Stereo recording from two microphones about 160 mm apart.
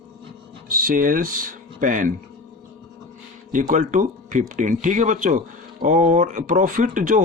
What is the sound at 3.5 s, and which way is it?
Speech, 55° right (ahead or behind).